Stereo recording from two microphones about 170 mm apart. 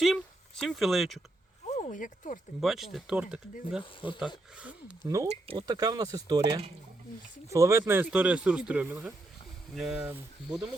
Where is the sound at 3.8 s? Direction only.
30° left (ahead or behind).